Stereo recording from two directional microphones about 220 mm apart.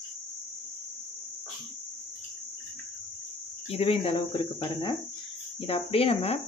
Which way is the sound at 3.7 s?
25° left (ahead or behind).